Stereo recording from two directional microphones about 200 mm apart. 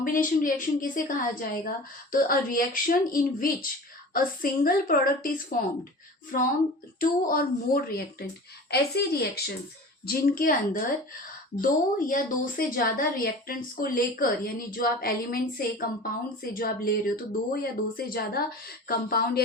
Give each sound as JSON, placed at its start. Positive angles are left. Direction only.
{"t": 0.0, "sound": "a woman's voice", "side_deg": 40}